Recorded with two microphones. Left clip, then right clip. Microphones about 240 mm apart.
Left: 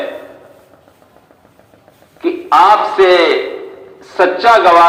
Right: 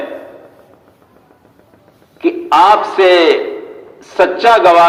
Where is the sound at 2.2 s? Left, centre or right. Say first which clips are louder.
Even; right.